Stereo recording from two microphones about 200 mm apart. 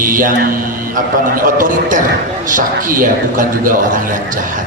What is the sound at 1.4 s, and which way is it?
A man's voice, 45° right (ahead or behind).